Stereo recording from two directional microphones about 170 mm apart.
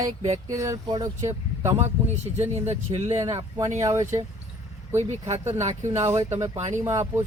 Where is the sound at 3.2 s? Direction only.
20° right (ahead or behind).